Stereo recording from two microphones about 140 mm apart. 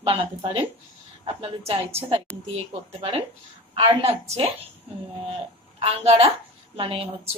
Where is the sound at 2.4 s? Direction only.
45° right (ahead or behind).